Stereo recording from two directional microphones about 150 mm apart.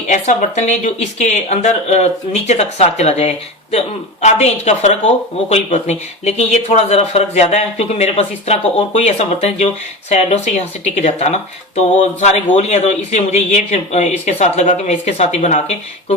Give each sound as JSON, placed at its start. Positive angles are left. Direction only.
{"t": 0.1, "sound": "speech", "side_deg": 50}